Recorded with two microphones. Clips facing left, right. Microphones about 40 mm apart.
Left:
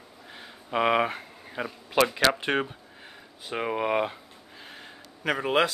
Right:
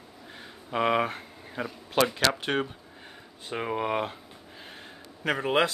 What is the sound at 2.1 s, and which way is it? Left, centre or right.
Speech, centre.